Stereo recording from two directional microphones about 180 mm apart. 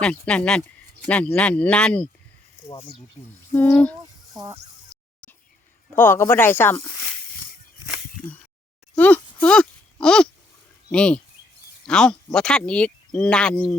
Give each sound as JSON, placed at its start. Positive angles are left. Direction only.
{"t": 0.0, "sound": "speech", "side_deg": 5}
{"t": 3.5, "sound": "speech", "side_deg": 10}
{"t": 4.4, "sound": "speech", "side_deg": -15}
{"t": 6.0, "sound": "speech", "side_deg": 10}
{"t": 9.0, "sound": "a sound", "side_deg": 10}
{"t": 10.9, "sound": "speech", "side_deg": 5}